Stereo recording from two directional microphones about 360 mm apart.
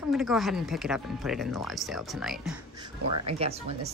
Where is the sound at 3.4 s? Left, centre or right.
Centre.